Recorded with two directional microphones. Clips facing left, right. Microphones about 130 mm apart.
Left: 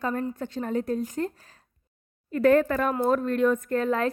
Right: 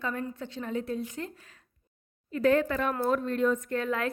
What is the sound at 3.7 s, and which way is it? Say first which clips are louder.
Speech: left 5 dB; 40° left (ahead or behind).